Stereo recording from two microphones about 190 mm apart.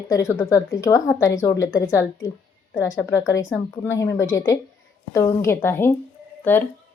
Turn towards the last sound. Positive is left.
turn(degrees=10)  # may be behind; listen again after turning